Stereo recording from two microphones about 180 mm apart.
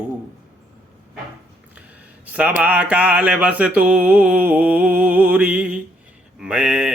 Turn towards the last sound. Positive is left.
turn(degrees=-5)  # may be behind; listen again after turning